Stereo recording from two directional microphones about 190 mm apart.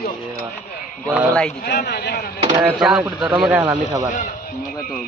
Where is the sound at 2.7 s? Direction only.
5° right (ahead or behind).